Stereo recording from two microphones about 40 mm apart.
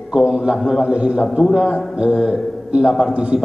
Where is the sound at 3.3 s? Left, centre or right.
Centre.